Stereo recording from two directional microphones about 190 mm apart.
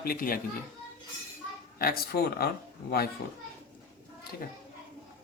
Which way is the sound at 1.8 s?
55° left (ahead or behind).